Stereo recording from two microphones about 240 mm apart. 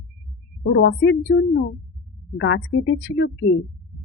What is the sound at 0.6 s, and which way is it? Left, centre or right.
A woman's voice, left.